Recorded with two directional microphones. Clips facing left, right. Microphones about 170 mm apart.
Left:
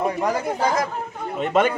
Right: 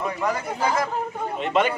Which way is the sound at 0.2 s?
40° left (ahead or behind).